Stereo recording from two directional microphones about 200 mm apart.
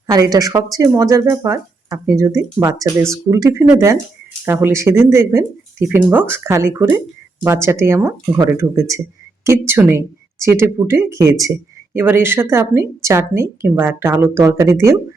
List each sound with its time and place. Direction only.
0.1 s a woman's voice: 20° right (ahead or behind)